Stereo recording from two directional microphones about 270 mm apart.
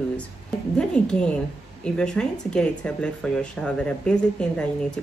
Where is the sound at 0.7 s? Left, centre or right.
Centre.